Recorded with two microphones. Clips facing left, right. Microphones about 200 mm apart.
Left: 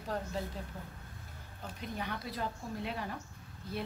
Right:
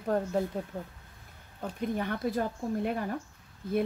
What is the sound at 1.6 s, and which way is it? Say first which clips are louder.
A woman's voice: right 9 dB; 50° right (ahead or behind).